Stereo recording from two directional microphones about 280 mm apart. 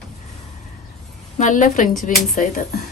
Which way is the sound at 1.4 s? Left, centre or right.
Left.